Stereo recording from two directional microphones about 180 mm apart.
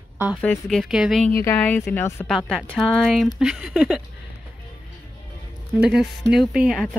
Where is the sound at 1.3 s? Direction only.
10° left (ahead or behind).